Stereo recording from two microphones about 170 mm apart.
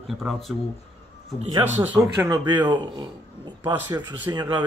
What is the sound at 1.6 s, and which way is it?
Speech, 10° right (ahead or behind).